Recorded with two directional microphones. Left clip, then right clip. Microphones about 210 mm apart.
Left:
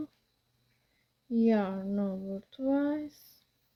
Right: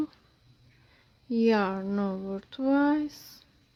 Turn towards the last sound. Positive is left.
turn(degrees=-20)  # may be behind; listen again after turning